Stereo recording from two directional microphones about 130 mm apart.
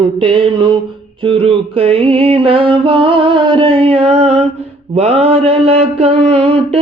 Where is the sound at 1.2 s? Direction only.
45° right (ahead or behind).